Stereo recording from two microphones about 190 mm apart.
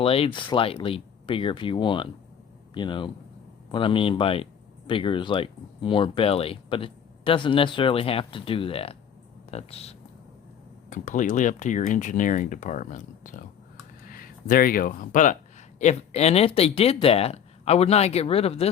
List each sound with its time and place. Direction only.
0.0 s speech: 30° left (ahead or behind)